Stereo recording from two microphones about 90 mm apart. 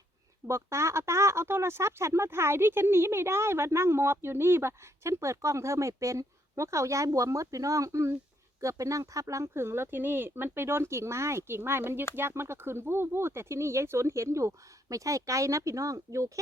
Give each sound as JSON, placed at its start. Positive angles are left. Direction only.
{"t": 0.4, "sound": "speech", "side_deg": -30}